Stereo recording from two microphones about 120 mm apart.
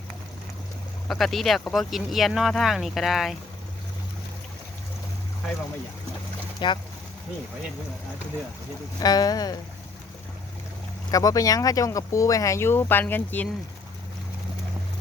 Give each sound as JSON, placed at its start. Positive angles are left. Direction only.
{"t": 1.0, "sound": "speech", "side_deg": 0}
{"t": 6.6, "sound": "speech", "side_deg": 40}
{"t": 9.0, "sound": "speech", "side_deg": 35}
{"t": 11.1, "sound": "speech", "side_deg": 30}